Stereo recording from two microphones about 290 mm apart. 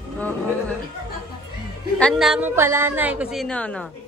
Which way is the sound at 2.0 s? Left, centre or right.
Centre.